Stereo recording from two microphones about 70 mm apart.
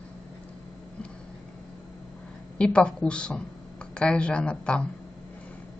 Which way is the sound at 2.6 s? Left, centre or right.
Centre.